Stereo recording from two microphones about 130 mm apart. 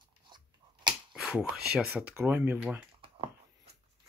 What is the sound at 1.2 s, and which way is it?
Speech, 5° right (ahead or behind).